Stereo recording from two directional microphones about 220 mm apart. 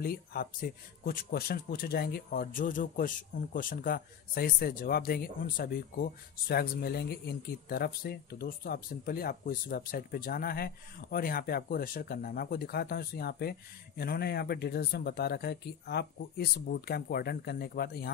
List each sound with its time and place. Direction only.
0.0 s speech: 45° left (ahead or behind)